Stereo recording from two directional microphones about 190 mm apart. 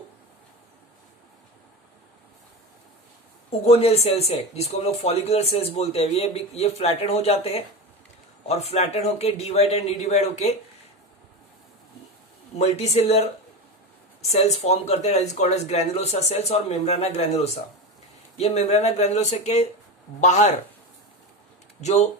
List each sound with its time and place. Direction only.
3.6 s speech: 30° left (ahead or behind)
12.5 s speech: 35° left (ahead or behind)
14.3 s speech: 35° left (ahead or behind)
21.8 s speech: 35° left (ahead or behind)